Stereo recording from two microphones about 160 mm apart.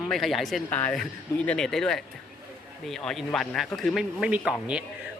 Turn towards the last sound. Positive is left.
turn(degrees=-5)  # may be behind; listen again after turning